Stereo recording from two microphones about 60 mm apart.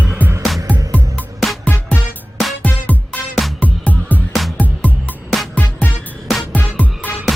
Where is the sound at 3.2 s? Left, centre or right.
Centre.